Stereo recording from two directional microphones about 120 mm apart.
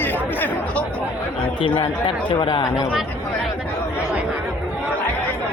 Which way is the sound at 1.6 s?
45° left (ahead or behind).